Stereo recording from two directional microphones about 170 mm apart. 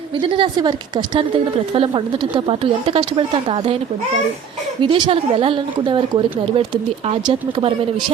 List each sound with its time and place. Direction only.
0.2 s a woman's voice: 30° right (ahead or behind)
4.8 s speech: 30° right (ahead or behind)